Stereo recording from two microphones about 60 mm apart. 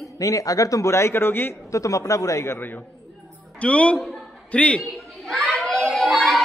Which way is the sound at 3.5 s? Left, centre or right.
Centre.